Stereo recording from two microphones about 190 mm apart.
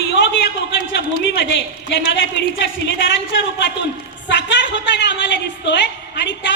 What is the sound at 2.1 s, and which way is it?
Speech, 70° left (ahead or behind).